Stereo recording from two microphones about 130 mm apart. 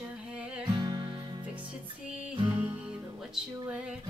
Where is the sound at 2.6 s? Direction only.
10° right (ahead or behind).